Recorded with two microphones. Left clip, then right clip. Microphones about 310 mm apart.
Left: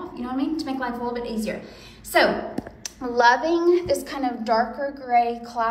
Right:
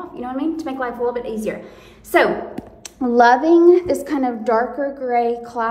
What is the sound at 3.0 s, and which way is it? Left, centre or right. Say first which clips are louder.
Speech: right 9 dB; right.